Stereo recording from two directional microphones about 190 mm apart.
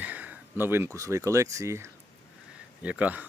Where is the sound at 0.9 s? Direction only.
15° right (ahead or behind).